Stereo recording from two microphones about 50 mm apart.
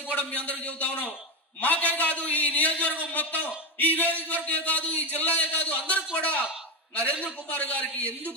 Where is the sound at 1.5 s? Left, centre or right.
Left.